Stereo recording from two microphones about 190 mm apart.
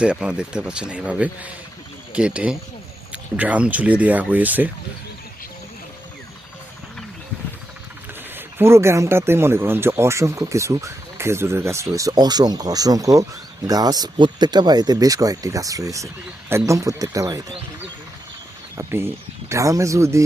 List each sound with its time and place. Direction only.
0.0 s speech: 5° right (ahead or behind)
8.4 s speech: 10° right (ahead or behind)
18.8 s speech: 10° right (ahead or behind)